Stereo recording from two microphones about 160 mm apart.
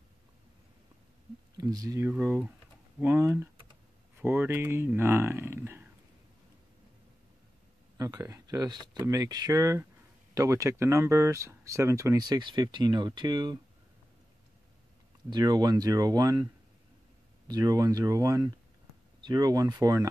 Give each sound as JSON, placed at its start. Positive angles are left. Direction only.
{"t": 1.6, "sound": "speech", "side_deg": -25}
{"t": 2.0, "sound": "speech", "side_deg": -10}
{"t": 8.0, "sound": "speech", "side_deg": -20}
{"t": 15.2, "sound": "speech", "side_deg": -25}
{"t": 17.5, "sound": "speech", "side_deg": -20}